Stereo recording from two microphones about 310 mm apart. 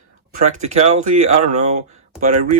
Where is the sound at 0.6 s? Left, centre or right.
Right.